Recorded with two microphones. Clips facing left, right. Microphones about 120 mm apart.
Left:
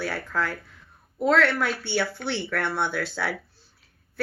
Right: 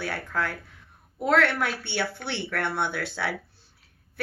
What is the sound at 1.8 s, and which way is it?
Speech, 55° right (ahead or behind).